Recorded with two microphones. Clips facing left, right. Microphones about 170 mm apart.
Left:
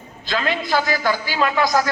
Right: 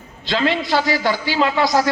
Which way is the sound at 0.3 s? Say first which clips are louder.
Right 3 dB; 25° right (ahead or behind).